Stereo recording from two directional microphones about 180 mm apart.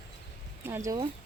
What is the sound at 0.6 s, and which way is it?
Speech, 15° right (ahead or behind).